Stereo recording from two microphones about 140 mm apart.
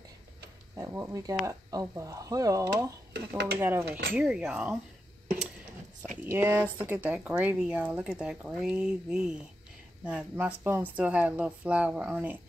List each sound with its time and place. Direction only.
0.7 s speech: 20° right (ahead or behind); by 4.7 s 5° right (ahead or behind)
6.2 s speech: 15° right (ahead or behind)